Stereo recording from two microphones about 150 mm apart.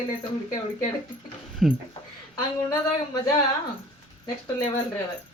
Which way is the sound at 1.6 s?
Centre (ahead or behind).